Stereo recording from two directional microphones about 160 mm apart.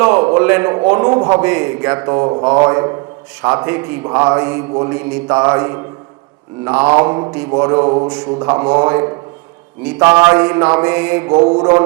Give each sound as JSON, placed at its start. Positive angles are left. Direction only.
{"t": 0.0, "sound": "mantra", "side_deg": -15}
{"t": 1.1, "sound": "a man's voice", "side_deg": -25}
{"t": 1.4, "sound": "a man's voice", "side_deg": -15}
{"t": 3.4, "sound": "mantra", "side_deg": -15}
{"t": 7.0, "sound": "a man's voice", "side_deg": -20}
{"t": 9.8, "sound": "mantra", "side_deg": -10}
{"t": 10.1, "sound": "mantra", "side_deg": -20}
{"t": 11.3, "sound": "a man's voice", "side_deg": -30}